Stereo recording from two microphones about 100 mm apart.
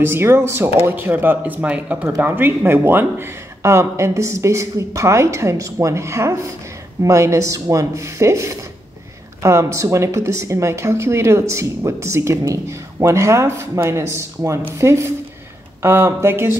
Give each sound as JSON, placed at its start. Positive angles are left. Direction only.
{"t": 0.0, "sound": "speech", "side_deg": -25}